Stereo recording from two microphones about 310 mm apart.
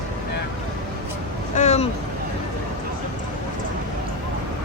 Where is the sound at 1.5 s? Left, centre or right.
Left.